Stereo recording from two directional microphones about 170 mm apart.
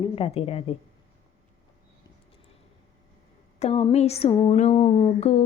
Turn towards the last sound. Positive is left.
turn(degrees=35)  # may be behind; listen again after turning